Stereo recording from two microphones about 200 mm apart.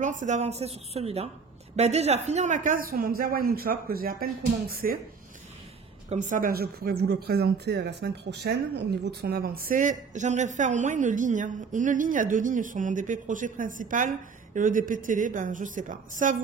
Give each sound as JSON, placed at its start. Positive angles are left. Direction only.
{"t": 0.0, "sound": "a man's voice", "side_deg": -40}
{"t": 6.0, "sound": "a man's voice", "side_deg": -40}